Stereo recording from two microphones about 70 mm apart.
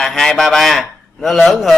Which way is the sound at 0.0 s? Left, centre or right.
Centre.